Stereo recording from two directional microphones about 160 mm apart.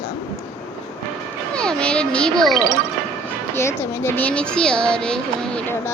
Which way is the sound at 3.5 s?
15° left (ahead or behind).